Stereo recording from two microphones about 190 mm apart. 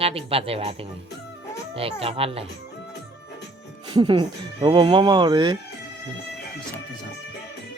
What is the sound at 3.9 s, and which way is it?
A man's voice, 25° right (ahead or behind).